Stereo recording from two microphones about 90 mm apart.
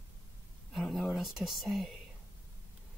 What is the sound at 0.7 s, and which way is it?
Speech, centre (ahead or behind).